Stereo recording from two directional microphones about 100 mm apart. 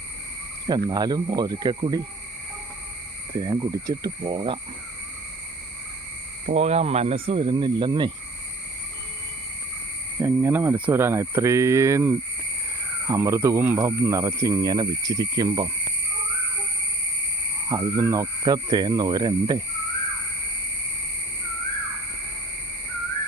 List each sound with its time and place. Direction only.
0.7 s speech: 40° right (ahead or behind)
3.3 s speech: 40° right (ahead or behind)
4.2 s speech: 60° right (ahead or behind)
6.6 s speech: 90° right; by 8.1 s 50° right (ahead or behind)
10.2 s speech: 25° right (ahead or behind); by 15.7 s 45° right (ahead or behind)
17.7 s speech: 35° right (ahead or behind)